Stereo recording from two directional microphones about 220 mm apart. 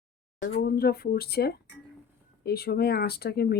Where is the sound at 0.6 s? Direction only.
45° left (ahead or behind).